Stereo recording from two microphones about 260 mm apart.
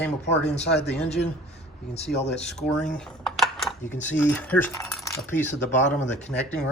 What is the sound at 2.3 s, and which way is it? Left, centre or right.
Speech, centre.